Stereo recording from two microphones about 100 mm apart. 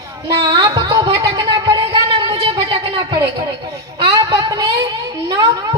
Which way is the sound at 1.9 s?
50° right (ahead or behind).